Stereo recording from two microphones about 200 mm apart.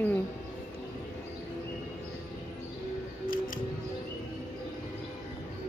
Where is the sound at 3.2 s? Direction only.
45° left (ahead or behind).